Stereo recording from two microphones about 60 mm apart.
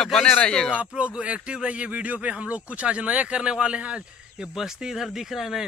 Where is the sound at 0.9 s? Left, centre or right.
Centre.